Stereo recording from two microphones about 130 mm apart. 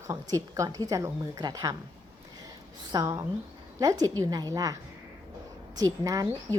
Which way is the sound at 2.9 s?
25° right (ahead or behind).